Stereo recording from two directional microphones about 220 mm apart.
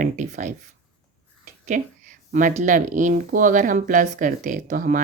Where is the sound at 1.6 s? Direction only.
35° right (ahead or behind).